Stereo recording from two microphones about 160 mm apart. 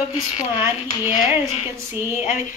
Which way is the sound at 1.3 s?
40° left (ahead or behind).